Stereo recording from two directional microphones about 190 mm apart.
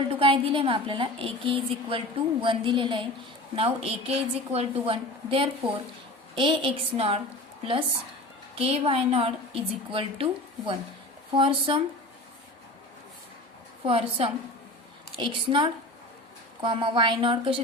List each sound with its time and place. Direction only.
0.1 s a woman's voice: 30° right (ahead or behind)
11.3 s a woman's voice: 25° right (ahead or behind)
13.8 s a woman's voice: 30° right (ahead or behind)